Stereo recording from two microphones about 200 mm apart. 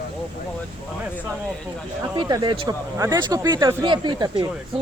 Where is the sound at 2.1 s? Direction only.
20° right (ahead or behind).